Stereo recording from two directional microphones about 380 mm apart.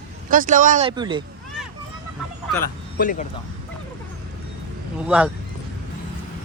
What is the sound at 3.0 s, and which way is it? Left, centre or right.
Speech, left.